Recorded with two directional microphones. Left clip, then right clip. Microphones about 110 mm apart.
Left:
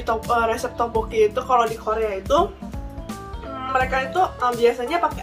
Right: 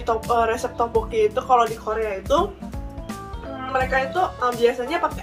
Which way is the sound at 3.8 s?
20° left (ahead or behind).